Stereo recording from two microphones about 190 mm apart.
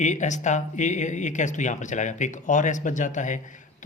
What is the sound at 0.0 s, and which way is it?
Speech, 40° left (ahead or behind).